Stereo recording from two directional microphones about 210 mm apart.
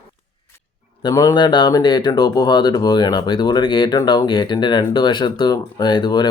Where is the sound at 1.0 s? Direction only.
15° left (ahead or behind).